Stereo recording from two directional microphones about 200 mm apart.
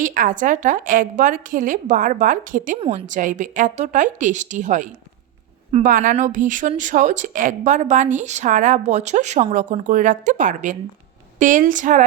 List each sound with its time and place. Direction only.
0.0 s a woman's voice: 40° right (ahead or behind)